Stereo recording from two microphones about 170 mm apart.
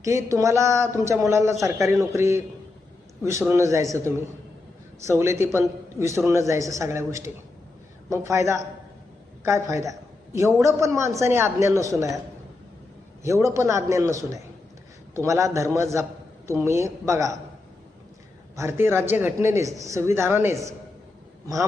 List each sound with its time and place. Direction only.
0.0 s a woman's voice: 20° right (ahead or behind)
5.0 s a woman's voice: 15° right (ahead or behind)
13.2 s a woman's voice: 15° right (ahead or behind)
18.5 s a woman's voice: 15° right (ahead or behind)